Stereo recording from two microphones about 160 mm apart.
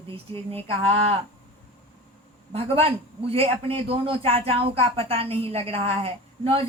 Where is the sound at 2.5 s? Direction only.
40° right (ahead or behind).